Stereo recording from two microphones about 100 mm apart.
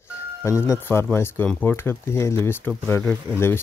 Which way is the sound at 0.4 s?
30° left (ahead or behind).